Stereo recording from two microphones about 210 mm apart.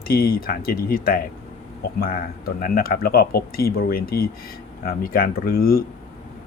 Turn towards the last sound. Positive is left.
turn(degrees=45)  # may be behind; listen again after turning